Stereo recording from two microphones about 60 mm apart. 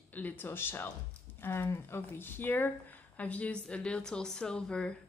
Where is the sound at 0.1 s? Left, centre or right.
Left.